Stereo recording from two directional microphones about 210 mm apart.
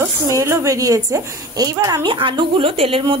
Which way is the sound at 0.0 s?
15° right (ahead or behind).